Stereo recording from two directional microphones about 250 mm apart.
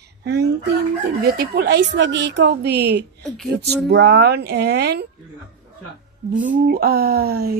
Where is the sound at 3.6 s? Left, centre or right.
Right.